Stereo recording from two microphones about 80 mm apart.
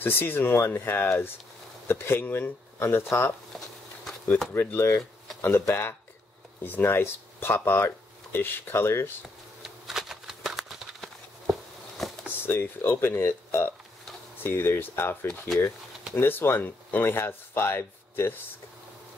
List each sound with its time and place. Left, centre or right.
0.0 s speech: left
4.6 s speech: left
9.6 s a sound: centre
12.3 s speech: left
16.2 s speech: left